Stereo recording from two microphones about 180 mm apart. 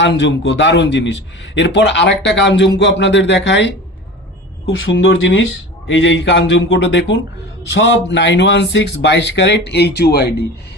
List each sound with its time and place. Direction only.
0.0 s a man's voice: 80° left
4.7 s a man's voice: 90° left; by 10.3 s 65° left (ahead or behind)